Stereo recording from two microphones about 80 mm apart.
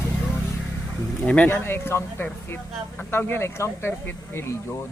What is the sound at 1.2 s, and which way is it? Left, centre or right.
A man's voice, centre.